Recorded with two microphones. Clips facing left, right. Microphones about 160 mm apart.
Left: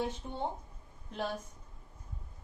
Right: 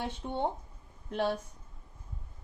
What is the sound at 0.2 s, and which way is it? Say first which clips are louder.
Speech: right 6 dB; 70° right (ahead or behind).